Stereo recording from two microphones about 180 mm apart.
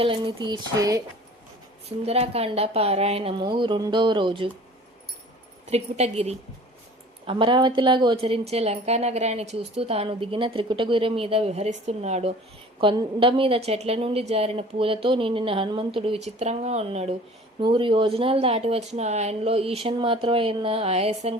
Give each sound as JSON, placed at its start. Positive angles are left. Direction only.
{"t": 0.0, "sound": "speech", "side_deg": -30}
{"t": 2.0, "sound": "a woman's voice", "side_deg": -35}
{"t": 5.7, "sound": "a woman's voice", "side_deg": -35}